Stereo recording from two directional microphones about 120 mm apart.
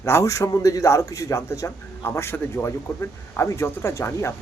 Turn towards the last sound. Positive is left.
turn(degrees=25)  # may be behind; listen again after turning